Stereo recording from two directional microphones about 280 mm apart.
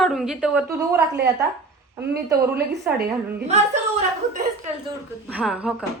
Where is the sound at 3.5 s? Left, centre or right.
Right.